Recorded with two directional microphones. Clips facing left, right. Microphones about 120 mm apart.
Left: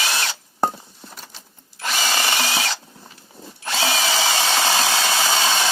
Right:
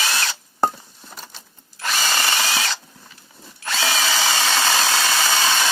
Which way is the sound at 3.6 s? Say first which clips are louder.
Left 1 dB; 20° left (ahead or behind).